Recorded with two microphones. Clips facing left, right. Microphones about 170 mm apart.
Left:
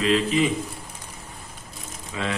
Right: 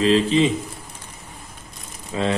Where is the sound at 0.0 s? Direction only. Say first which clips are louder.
Right 4 dB; 30° right (ahead or behind).